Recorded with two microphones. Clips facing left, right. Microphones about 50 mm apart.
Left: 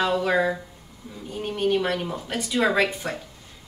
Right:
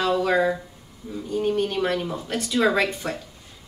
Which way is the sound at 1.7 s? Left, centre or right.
Centre.